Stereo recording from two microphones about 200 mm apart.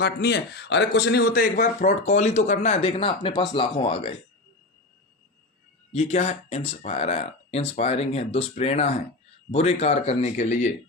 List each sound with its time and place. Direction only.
0.0 s a man's voice: 55° left (ahead or behind); by 4.1 s 30° left (ahead or behind)
5.9 s a man's voice: 30° left (ahead or behind)